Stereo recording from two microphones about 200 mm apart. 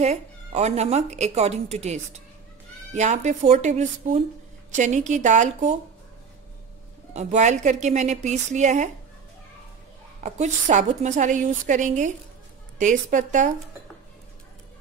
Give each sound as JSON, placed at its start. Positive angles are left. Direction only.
{"t": 0.0, "sound": "a woman's voice", "side_deg": -35}
{"t": 7.2, "sound": "a woman's voice", "side_deg": -35}
{"t": 10.2, "sound": "a woman's voice", "side_deg": -35}